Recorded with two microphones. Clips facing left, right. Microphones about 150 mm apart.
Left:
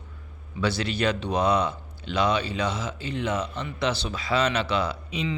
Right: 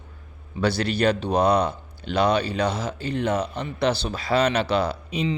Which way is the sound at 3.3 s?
60° right (ahead or behind).